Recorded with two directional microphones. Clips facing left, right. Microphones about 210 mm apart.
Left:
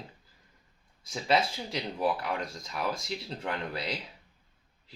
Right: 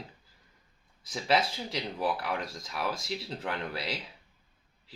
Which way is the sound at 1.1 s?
Centre (ahead or behind).